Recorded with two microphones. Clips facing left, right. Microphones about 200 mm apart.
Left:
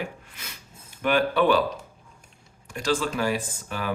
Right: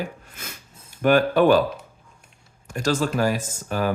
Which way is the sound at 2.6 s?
45° right (ahead or behind).